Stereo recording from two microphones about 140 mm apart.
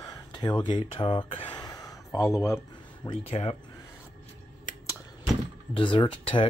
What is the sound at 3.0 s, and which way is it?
Speech, 40° left (ahead or behind).